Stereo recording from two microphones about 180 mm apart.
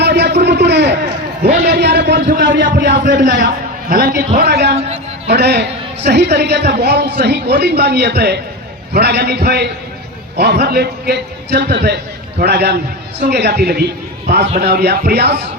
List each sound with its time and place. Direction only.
0.0 s a sound: 70° right (ahead or behind)
1.6 s a man's voice: 65° right (ahead or behind)
2.6 s a man's voice: 65° right (ahead or behind)
3.8 s a man's voice: 55° right (ahead or behind)
4.4 s a man's voice: 70° right (ahead or behind)